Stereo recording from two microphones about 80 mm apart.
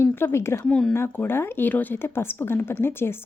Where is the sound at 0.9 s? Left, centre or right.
Left.